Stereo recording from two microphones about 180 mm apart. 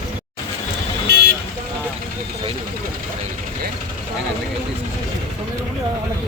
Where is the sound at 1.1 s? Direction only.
70° right (ahead or behind).